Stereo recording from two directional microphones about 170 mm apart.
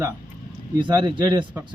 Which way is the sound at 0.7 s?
25° right (ahead or behind).